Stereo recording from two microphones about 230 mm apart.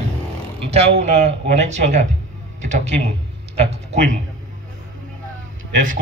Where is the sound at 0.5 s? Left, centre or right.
Right.